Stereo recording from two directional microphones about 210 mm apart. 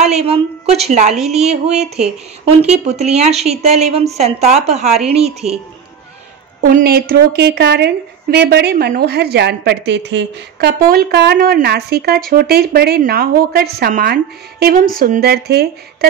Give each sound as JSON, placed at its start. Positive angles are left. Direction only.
{"t": 0.0, "sound": "speech", "side_deg": -30}
{"t": 1.1, "sound": "a woman's voice", "side_deg": 0}
{"t": 1.4, "sound": "a woman's voice", "side_deg": -30}
{"t": 6.6, "sound": "a woman's voice", "side_deg": -45}